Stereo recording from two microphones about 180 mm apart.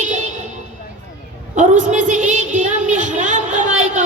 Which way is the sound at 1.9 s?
45° right (ahead or behind).